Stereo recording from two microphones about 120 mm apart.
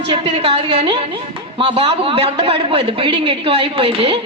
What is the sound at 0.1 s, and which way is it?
A woman's voice, 50° right (ahead or behind).